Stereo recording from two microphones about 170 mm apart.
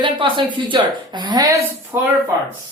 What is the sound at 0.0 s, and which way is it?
A woman's voice, 30° right (ahead or behind).